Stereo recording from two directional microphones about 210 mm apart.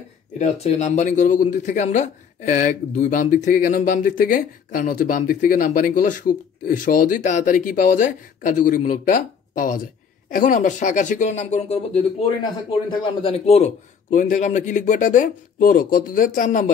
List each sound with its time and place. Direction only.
0.4 s speech: 35° left (ahead or behind)